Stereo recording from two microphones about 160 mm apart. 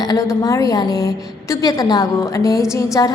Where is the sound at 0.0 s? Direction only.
20° left (ahead or behind).